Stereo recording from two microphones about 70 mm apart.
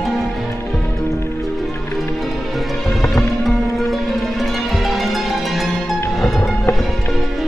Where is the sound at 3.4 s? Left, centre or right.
Centre.